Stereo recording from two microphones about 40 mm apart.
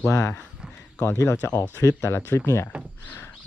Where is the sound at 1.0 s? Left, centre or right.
Left.